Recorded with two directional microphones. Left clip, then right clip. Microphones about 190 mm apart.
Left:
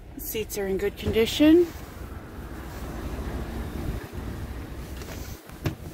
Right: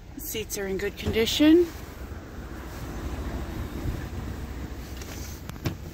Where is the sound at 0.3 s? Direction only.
5° left (ahead or behind).